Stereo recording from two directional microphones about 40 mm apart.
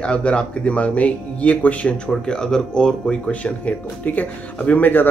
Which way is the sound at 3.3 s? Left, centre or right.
Left.